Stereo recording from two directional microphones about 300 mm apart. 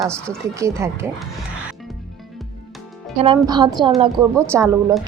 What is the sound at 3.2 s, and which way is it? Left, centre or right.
A woman's voice, centre.